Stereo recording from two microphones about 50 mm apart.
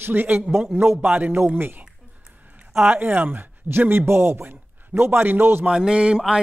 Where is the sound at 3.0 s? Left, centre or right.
Right.